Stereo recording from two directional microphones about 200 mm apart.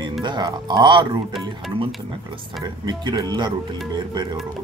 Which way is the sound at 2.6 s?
20° right (ahead or behind).